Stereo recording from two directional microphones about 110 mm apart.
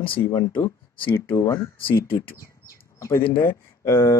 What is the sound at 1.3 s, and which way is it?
Speech, 50° left (ahead or behind).